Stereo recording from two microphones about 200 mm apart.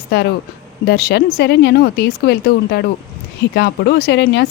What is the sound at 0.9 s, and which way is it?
Speech, 55° left (ahead or behind).